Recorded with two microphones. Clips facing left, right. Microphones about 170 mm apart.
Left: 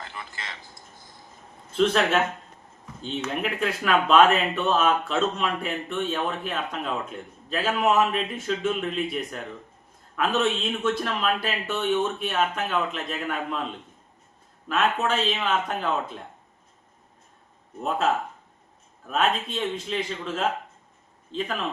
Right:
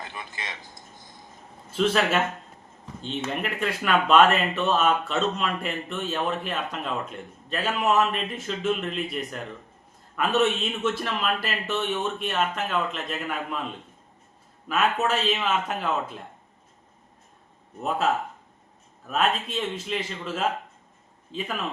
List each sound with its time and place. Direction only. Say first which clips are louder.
0.0 s a sound: right 1 dB; 20° right (ahead or behind)
1.7 s speech: left 1 dB; 5° right (ahead or behind)
3.2 s speech: left 2 dB; centre (ahead or behind)
14.7 s speech: even; 5° right (ahead or behind)
17.8 s speech: even; 5° right (ahead or behind)